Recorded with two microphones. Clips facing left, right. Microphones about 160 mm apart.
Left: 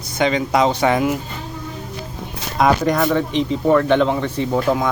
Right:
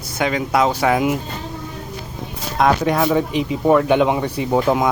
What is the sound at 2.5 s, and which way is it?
Speech, centre (ahead or behind).